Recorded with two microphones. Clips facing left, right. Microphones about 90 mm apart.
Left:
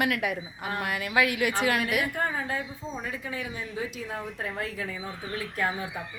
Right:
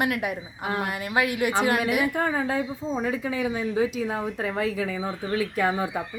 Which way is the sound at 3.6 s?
90° right.